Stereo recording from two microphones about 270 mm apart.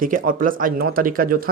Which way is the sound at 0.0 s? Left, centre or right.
Right.